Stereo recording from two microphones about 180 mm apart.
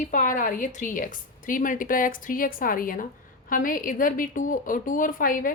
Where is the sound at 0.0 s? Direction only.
45° left (ahead or behind).